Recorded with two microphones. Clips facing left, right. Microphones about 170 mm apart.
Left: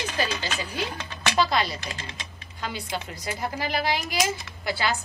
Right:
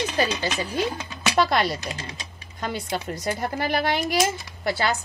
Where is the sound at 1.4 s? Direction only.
60° right (ahead or behind).